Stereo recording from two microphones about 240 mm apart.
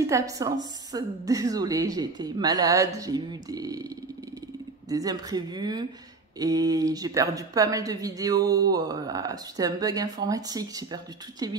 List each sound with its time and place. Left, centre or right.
0.0 s a woman's voice: centre
4.8 s a woman's voice: centre